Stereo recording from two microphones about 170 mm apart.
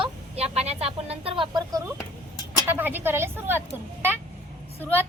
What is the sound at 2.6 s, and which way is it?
Speech, 10° right (ahead or behind).